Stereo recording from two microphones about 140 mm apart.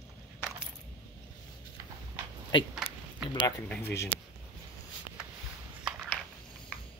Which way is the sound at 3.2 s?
35° left (ahead or behind).